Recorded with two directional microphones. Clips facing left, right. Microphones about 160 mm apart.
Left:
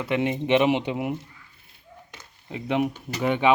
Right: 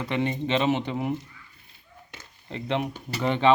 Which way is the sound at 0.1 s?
10° left (ahead or behind).